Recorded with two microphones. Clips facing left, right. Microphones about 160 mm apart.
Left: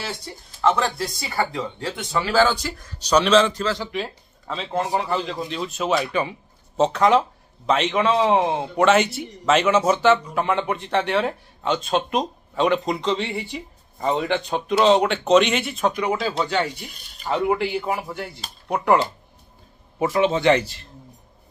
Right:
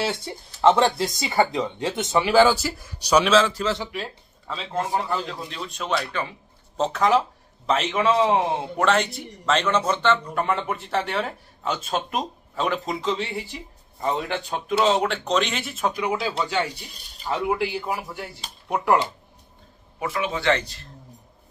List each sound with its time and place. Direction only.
0.1 s speech: 25° right (ahead or behind); by 3.6 s 5° right (ahead or behind)
3.6 s speech: 20° right (ahead or behind)
3.9 s a man's voice: centre (ahead or behind)
6.8 s a man's voice: centre (ahead or behind)
20.0 s a man's voice: 25° left (ahead or behind)
20.6 s a man's voice: centre (ahead or behind)